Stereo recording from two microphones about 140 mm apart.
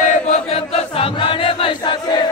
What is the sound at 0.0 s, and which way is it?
Chant, 50° left (ahead or behind).